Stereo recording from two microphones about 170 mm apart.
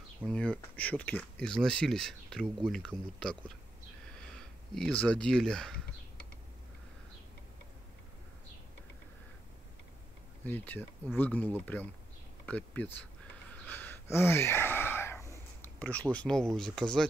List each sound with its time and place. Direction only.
0.2 s speech: 5° left (ahead or behind)
10.4 s speech: 10° left (ahead or behind)
13.5 s gasp: 10° left (ahead or behind)
15.6 s speech: 10° left (ahead or behind)